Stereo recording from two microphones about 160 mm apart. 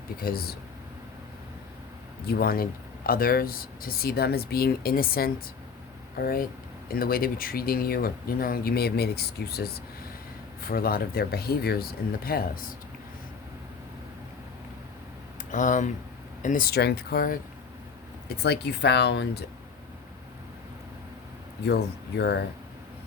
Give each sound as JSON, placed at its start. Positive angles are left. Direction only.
{"t": 0.2, "sound": "speech", "side_deg": 70}
{"t": 2.2, "sound": "speech", "side_deg": 75}
{"t": 10.6, "sound": "speech", "side_deg": 65}
{"t": 15.5, "sound": "speech", "side_deg": 50}
{"t": 18.3, "sound": "speech", "side_deg": 90}
{"t": 21.7, "sound": "speech", "side_deg": 90}